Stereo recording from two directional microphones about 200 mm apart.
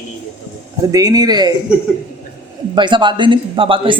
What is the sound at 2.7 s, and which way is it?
A woman's voice, 25° right (ahead or behind).